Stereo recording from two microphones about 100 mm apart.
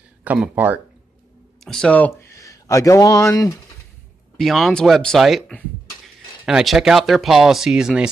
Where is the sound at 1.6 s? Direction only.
5° left (ahead or behind).